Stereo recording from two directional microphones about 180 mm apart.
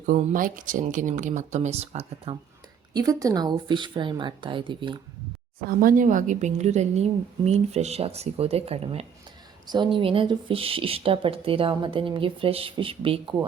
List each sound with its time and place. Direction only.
0.0 s speech: 50° right (ahead or behind)
2.9 s speech: 20° right (ahead or behind)
5.6 s a woman's voice: 50° right (ahead or behind); by 13.2 s 30° right (ahead or behind)